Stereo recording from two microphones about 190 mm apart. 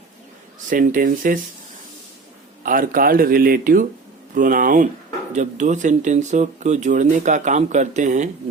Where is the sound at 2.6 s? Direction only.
45° right (ahead or behind).